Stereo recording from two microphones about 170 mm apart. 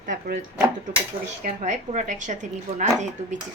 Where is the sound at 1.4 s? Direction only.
45° right (ahead or behind).